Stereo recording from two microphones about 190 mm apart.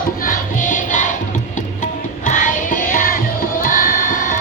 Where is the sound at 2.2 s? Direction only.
45° left (ahead or behind).